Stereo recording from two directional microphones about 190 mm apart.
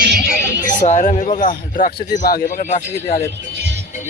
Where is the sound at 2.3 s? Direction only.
45° left (ahead or behind).